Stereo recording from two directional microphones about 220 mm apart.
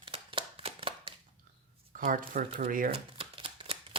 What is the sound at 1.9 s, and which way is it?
Speech, 40° right (ahead or behind).